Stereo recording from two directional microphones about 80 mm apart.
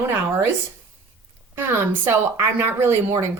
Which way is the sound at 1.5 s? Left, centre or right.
Right.